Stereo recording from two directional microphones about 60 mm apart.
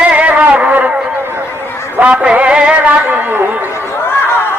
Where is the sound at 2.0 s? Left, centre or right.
Right.